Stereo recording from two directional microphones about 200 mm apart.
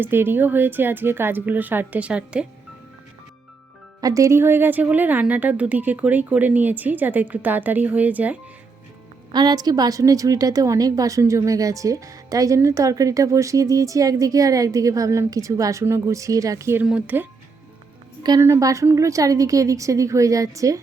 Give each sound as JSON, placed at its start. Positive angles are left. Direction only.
{"t": 0.0, "sound": "a woman's voice", "side_deg": -10}
{"t": 4.0, "sound": "a woman's voice", "side_deg": -15}
{"t": 9.3, "sound": "a woman's voice", "side_deg": -20}